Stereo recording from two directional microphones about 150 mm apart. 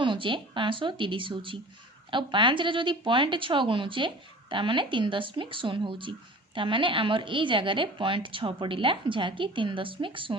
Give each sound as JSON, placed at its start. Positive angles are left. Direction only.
{"t": 0.0, "sound": "speech", "side_deg": -35}